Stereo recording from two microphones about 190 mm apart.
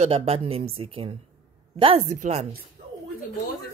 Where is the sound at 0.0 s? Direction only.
30° right (ahead or behind).